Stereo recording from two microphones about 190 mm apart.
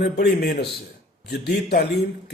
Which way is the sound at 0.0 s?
60° left (ahead or behind).